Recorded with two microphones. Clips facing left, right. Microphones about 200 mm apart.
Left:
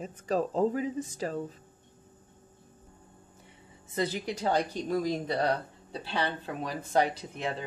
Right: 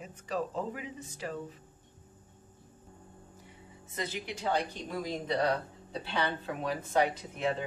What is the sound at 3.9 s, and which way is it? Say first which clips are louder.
Speech: left 7 dB; 35° left (ahead or behind).